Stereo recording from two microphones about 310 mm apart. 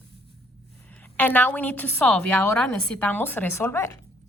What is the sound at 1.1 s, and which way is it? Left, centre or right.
A woman's voice, centre.